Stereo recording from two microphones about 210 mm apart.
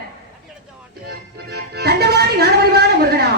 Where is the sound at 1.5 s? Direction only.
50° right (ahead or behind).